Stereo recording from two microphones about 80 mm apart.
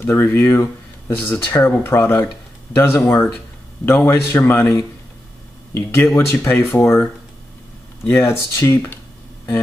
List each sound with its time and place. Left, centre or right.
0.0 s a man's voice: left
8.1 s speech: left